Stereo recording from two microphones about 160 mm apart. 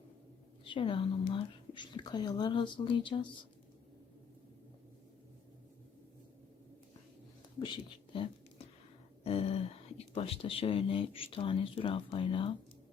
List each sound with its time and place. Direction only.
0.6 s speech: 30° left (ahead or behind)
7.6 s speech: 30° left (ahead or behind)
9.2 s a sound: 40° left (ahead or behind)
10.2 s speech: 35° left (ahead or behind)